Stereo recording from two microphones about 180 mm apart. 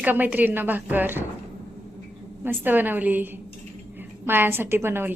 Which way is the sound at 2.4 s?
10° right (ahead or behind).